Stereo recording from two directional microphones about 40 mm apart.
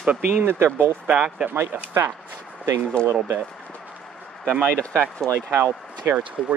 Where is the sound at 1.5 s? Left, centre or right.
Right.